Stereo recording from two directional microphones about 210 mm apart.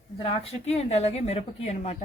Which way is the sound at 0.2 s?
30° left (ahead or behind).